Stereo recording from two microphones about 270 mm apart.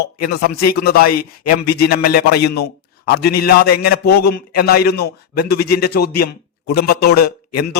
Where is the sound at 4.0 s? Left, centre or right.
Left.